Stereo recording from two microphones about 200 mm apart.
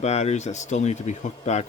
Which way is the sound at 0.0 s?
35° left (ahead or behind).